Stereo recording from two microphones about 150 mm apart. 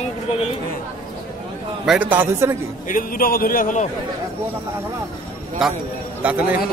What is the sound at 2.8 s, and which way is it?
A man's voice, 70° left (ahead or behind).